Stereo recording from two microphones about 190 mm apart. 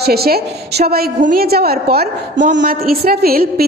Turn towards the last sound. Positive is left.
turn(degrees=-55)  # may be behind; listen again after turning